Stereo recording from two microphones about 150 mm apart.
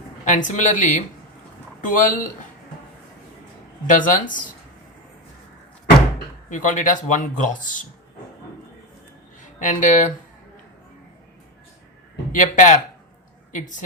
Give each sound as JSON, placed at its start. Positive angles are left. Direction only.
{"t": 0.3, "sound": "speech", "side_deg": 55}
{"t": 3.8, "sound": "speech", "side_deg": 60}
{"t": 6.5, "sound": "speech", "side_deg": 60}
{"t": 9.4, "sound": "speech", "side_deg": 55}
{"t": 12.3, "sound": "a woman's voice", "side_deg": 60}